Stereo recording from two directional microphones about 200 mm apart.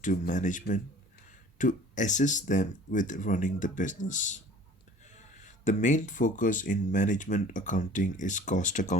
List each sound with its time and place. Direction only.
0.0 s speech: 40° left (ahead or behind)